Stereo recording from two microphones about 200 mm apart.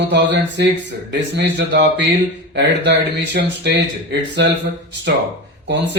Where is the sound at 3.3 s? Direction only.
60° right (ahead or behind).